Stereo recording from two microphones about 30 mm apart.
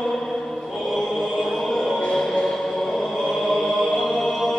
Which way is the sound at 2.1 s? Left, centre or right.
Centre.